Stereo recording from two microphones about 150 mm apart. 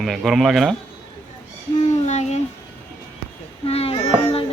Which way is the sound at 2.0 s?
50° left (ahead or behind).